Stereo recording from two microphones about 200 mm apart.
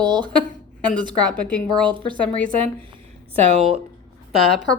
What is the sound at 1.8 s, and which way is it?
Speech, 25° right (ahead or behind).